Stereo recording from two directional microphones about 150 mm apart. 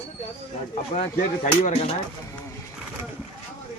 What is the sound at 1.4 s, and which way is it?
Speech, 55° left (ahead or behind).